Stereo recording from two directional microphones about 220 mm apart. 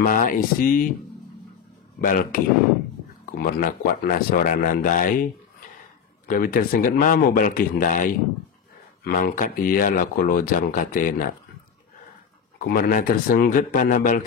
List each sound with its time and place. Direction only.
0.0 s speech: 35° left (ahead or behind)
2.0 s speech: 40° left (ahead or behind)
12.5 s speech: 40° left (ahead or behind)